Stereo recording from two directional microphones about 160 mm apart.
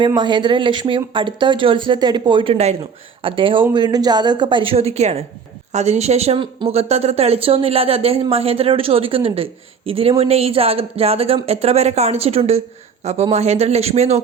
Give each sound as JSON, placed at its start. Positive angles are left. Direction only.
{"t": 0.0, "sound": "speech", "side_deg": -30}